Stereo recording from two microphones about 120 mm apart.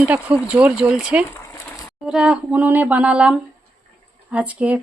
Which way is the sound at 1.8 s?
5° right (ahead or behind).